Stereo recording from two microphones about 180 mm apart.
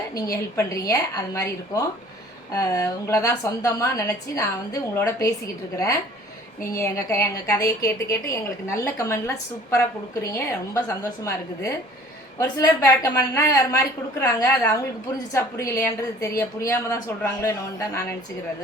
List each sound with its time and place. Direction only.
0.5 s a woman's voice: 20° left (ahead or behind)